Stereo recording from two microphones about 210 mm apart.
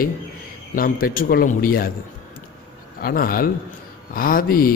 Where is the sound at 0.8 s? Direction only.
45° left (ahead or behind).